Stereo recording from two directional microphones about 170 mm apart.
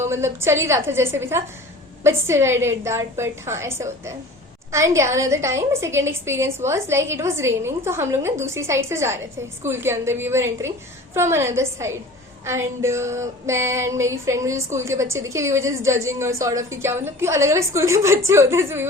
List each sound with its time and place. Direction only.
0.0 s a woman's voice: 15° right (ahead or behind)